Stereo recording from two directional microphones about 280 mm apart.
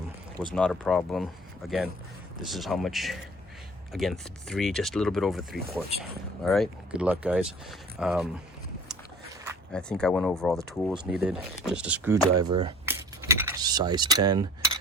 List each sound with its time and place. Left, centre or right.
0.5 s speech: centre
9.7 s speech: centre